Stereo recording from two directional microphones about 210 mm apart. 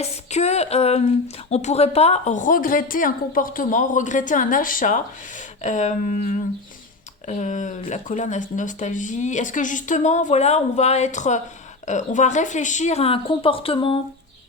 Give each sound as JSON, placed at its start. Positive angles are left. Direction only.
{"t": 0.0, "sound": "speech", "side_deg": 30}